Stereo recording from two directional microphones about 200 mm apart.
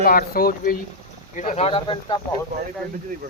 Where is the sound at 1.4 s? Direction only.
35° left (ahead or behind).